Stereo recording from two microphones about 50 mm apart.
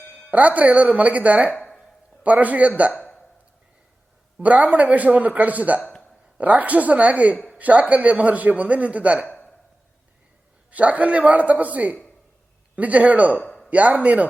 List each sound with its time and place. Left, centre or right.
0.3 s a man's voice: right
4.4 s a man's voice: right
10.7 s speech: right